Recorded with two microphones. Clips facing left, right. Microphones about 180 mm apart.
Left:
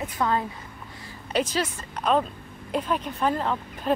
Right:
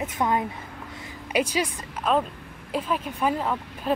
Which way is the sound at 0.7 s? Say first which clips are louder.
Right 3 dB; 85° right.